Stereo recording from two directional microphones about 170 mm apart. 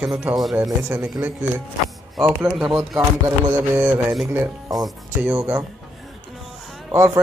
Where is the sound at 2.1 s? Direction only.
5° right (ahead or behind).